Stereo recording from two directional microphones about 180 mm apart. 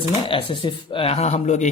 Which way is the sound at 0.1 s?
30° left (ahead or behind).